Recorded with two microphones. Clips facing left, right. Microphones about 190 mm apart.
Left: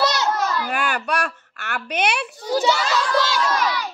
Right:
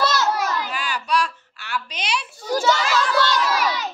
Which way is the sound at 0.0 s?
15° left (ahead or behind).